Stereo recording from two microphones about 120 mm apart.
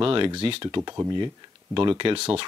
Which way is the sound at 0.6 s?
35° right (ahead or behind).